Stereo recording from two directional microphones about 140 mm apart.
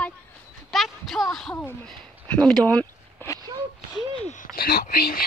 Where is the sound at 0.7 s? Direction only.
Centre (ahead or behind).